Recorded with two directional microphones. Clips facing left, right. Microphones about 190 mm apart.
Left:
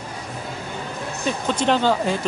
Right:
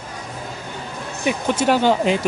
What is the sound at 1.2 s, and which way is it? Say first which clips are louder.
Speech: right 3 dB; 10° right (ahead or behind).